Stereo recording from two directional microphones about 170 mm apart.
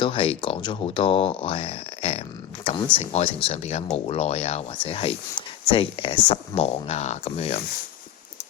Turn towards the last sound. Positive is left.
turn(degrees=35)  # may be behind; listen again after turning